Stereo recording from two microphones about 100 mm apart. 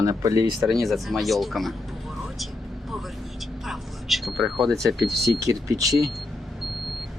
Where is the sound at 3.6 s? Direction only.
Centre (ahead or behind).